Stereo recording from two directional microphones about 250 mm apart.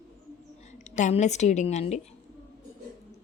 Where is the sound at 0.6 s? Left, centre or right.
Left.